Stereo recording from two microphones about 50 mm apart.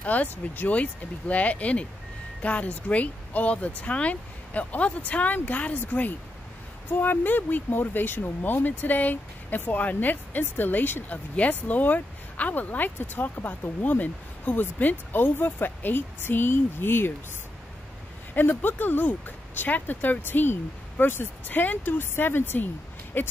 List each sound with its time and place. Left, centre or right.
0.0 s speech: left
11.1 s speech: left
18.3 s speech: left